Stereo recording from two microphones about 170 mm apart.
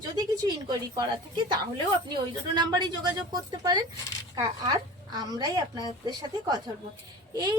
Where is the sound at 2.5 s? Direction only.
25° right (ahead or behind).